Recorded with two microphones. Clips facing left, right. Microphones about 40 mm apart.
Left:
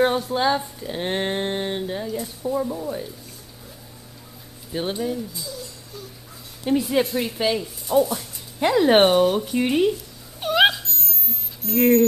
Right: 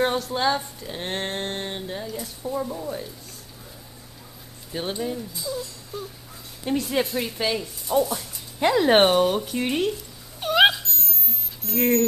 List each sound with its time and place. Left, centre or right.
0.3 s speech: centre
4.7 s speech: centre
5.9 s a sound: right
6.6 s speech: centre
10.4 s cat: centre
11.6 s speech: centre